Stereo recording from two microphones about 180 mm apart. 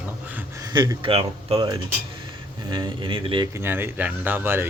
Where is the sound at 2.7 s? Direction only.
25° right (ahead or behind).